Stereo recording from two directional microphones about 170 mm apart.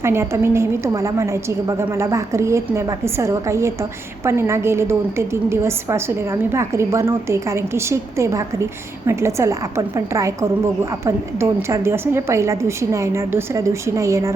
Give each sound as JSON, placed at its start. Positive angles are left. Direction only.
{"t": 0.0, "sound": "a woman's voice", "side_deg": -15}